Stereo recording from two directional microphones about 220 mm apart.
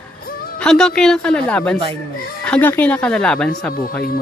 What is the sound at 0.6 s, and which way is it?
Speech, 5° left (ahead or behind).